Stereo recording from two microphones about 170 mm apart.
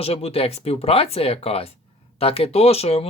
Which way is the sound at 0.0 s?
35° left (ahead or behind).